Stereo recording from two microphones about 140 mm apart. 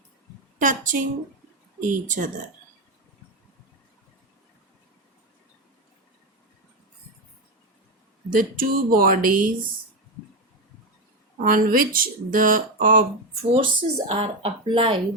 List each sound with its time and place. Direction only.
0.6 s speech: 70° right (ahead or behind)
8.4 s speech: 90° right
11.3 s speech: 80° right
13.5 s speech: 40° right (ahead or behind)